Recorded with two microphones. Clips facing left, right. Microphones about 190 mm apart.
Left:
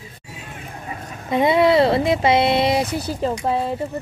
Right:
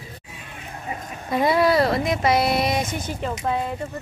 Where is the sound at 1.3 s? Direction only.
20° left (ahead or behind).